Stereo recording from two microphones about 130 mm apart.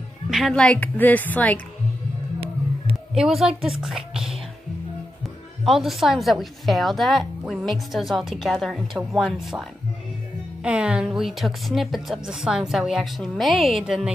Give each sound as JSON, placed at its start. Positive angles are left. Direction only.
{"t": 0.3, "sound": "a woman's voice", "side_deg": 0}
{"t": 3.2, "sound": "a woman's voice", "side_deg": 0}